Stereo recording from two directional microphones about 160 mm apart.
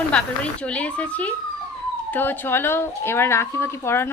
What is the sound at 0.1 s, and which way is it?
Speech, 5° left (ahead or behind).